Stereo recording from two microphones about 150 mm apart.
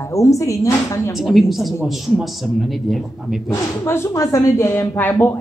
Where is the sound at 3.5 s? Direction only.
20° left (ahead or behind).